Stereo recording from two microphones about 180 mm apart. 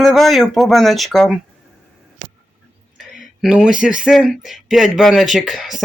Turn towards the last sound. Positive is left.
turn(degrees=0)  # may be behind; listen again after turning